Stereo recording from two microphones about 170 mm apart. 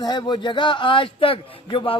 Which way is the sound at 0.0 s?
25° left (ahead or behind).